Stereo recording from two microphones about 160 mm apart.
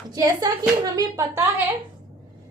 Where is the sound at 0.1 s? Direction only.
25° right (ahead or behind).